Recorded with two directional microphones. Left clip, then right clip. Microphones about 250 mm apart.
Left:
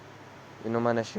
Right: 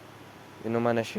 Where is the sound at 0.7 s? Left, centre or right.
Centre.